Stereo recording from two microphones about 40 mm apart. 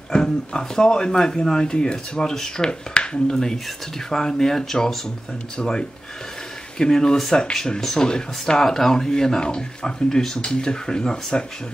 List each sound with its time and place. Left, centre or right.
0.1 s speech: centre